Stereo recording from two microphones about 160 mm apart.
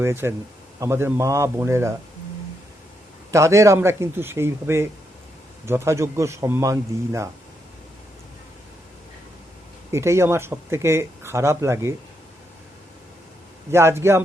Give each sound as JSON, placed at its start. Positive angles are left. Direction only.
{"t": 0.0, "sound": "speech", "side_deg": -15}
{"t": 3.3, "sound": "speech", "side_deg": -20}
{"t": 9.9, "sound": "speech", "side_deg": -15}
{"t": 13.7, "sound": "speech", "side_deg": -15}